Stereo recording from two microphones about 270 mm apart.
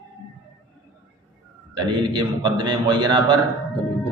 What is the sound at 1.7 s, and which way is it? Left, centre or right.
A man's voice, centre.